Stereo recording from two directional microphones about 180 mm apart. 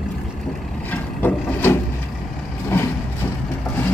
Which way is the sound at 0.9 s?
10° left (ahead or behind).